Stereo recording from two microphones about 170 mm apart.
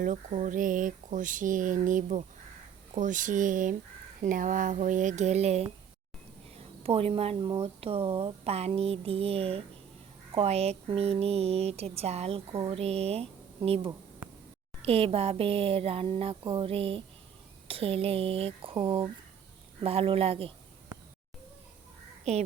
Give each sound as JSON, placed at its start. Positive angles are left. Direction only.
{"t": 0.0, "sound": "speech", "side_deg": -45}
{"t": 6.8, "sound": "speech", "side_deg": -35}
{"t": 22.2, "sound": "speech", "side_deg": -40}